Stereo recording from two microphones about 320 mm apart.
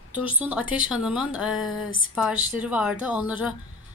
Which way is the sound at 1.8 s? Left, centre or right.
Left.